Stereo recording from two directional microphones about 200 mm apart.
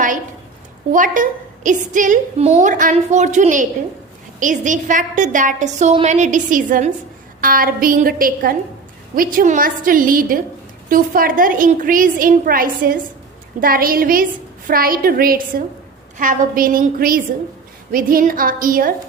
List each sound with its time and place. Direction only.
0.9 s a woman's voice: 40° right (ahead or behind)